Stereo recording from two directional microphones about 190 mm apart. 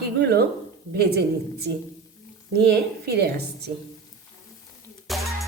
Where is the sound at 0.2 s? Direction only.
60° right (ahead or behind).